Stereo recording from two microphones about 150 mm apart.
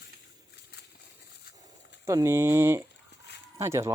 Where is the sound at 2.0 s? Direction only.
20° right (ahead or behind).